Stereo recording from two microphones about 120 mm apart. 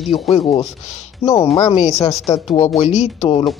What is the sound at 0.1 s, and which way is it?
Speech, 55° left (ahead or behind).